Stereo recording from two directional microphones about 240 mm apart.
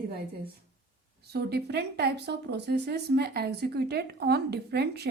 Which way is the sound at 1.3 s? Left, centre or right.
Right.